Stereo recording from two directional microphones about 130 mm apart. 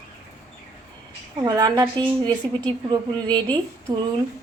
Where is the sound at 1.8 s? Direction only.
35° right (ahead or behind).